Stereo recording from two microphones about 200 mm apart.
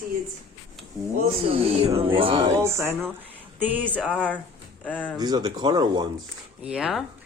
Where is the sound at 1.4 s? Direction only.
30° right (ahead or behind).